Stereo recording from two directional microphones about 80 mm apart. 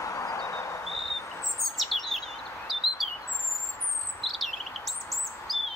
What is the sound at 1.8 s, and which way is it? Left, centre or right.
Chirp, centre.